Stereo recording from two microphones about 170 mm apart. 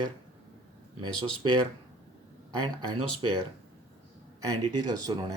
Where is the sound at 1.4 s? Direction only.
30° right (ahead or behind).